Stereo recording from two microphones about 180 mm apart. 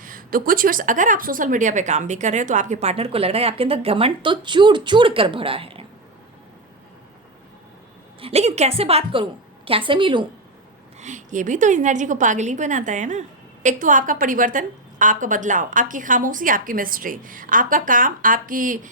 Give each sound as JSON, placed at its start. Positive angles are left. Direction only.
{"t": 0.0, "sound": "a woman's voice", "side_deg": -50}
{"t": 8.2, "sound": "a woman's voice", "side_deg": -35}
{"t": 11.0, "sound": "a woman's voice", "side_deg": -45}